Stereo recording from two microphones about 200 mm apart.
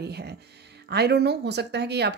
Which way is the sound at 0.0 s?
55° right (ahead or behind).